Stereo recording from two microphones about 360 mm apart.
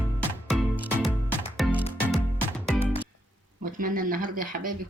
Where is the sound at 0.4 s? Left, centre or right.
Centre.